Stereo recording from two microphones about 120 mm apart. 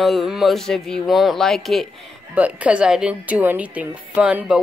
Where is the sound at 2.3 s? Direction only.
10° right (ahead or behind).